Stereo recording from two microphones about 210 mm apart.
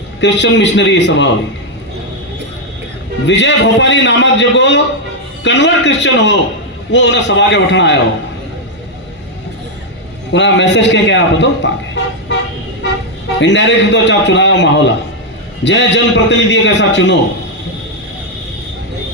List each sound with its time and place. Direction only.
0.2 s a man's voice: 60° left (ahead or behind)
3.2 s a man's voice: 60° left (ahead or behind)
10.3 s a man's voice: 60° left (ahead or behind)
13.4 s a man's voice: 60° left (ahead or behind)